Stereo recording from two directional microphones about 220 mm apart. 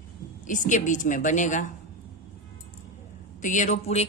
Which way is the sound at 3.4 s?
35° left (ahead or behind).